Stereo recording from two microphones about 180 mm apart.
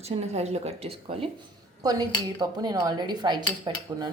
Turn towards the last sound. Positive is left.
turn(degrees=-25)  # may be behind; listen again after turning